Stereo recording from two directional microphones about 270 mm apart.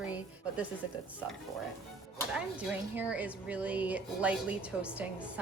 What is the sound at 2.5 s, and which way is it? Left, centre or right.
A woman's voice, centre.